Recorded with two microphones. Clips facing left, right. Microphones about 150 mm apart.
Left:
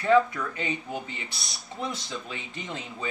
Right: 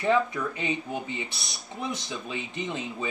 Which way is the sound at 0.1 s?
15° right (ahead or behind).